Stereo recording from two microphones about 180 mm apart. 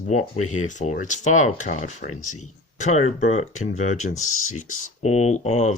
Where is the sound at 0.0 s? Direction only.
40° left (ahead or behind).